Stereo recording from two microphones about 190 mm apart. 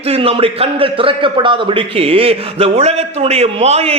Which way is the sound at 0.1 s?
30° right (ahead or behind).